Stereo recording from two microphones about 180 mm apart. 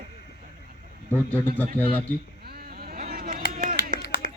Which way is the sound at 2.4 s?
60° right (ahead or behind).